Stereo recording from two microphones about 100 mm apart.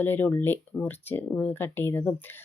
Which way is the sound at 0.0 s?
20° left (ahead or behind).